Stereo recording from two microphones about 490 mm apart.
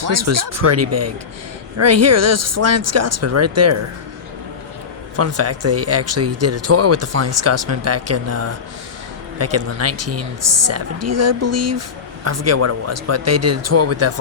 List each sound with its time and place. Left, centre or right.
0.1 s speech: right
5.1 s speech: right